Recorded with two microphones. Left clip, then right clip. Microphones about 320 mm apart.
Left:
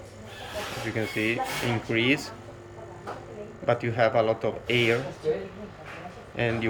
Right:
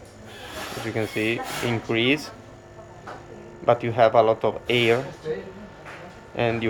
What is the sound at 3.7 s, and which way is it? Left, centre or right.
Speech, centre.